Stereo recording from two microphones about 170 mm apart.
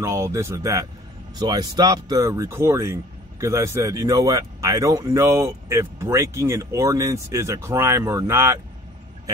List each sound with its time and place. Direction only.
0.0 s speech: 15° right (ahead or behind)